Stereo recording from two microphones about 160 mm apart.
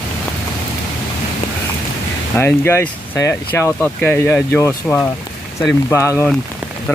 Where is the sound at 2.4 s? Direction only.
15° left (ahead or behind).